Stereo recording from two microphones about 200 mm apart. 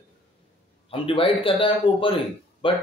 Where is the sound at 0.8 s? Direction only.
25° left (ahead or behind).